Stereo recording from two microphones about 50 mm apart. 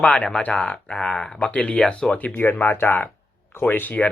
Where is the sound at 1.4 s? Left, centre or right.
Left.